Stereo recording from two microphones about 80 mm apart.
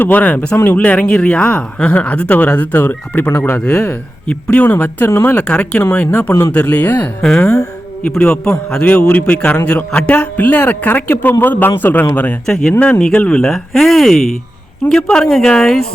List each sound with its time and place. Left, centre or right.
0.0 s speech: centre
0.5 s speech: left
0.8 s speech: centre
5.0 s speech: left
5.3 s speech: centre
5.8 s speech: left
6.5 s speech: centre
12.5 s speech: centre